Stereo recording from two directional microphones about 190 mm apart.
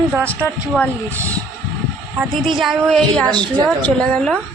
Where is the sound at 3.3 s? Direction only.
25° right (ahead or behind).